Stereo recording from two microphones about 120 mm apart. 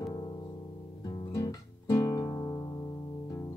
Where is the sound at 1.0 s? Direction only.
40° left (ahead or behind).